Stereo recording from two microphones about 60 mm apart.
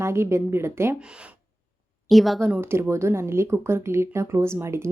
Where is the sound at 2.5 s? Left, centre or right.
Right.